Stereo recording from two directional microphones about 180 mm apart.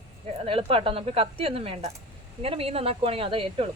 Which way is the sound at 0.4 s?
30° right (ahead or behind).